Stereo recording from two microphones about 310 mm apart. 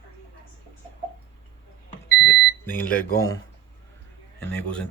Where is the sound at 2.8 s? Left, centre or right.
Left.